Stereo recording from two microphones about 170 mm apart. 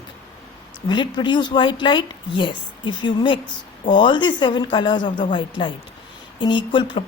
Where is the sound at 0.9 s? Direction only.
25° left (ahead or behind).